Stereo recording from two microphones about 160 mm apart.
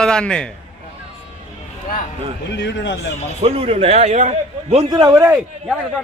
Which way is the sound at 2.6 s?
90° left.